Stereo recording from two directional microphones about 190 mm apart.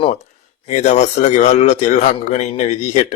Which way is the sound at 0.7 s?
40° left (ahead or behind).